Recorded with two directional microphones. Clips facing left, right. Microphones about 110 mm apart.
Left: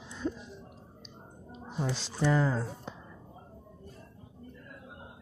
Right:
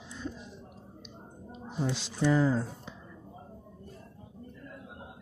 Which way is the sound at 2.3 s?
5° right (ahead or behind).